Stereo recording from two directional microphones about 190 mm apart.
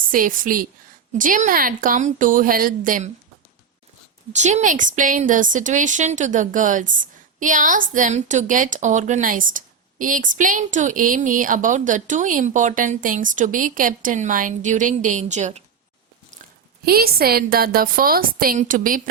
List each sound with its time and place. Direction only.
0.0 s a woman's voice: 45° right (ahead or behind)
4.3 s a woman's voice: 40° right (ahead or behind)
16.8 s a woman's voice: 50° right (ahead or behind)